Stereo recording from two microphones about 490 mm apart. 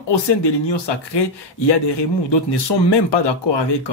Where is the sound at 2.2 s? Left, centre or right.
Left.